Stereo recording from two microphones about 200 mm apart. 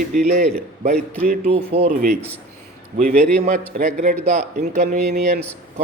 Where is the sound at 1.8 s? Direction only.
50° right (ahead or behind).